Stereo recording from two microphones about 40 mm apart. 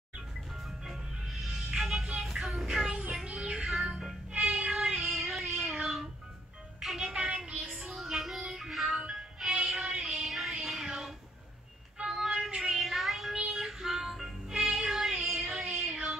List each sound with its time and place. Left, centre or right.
0.8 s music: centre
2.4 s child singing: centre
3.4 s music: right
3.7 s music: centre
4.3 s music: right
5.0 s cat: centre
7.0 s child singing: centre
7.2 s music: right
7.6 s music: centre
12.0 s child singing: centre
12.7 s child singing: centre
13.3 s music: centre
15.2 s female singing: centre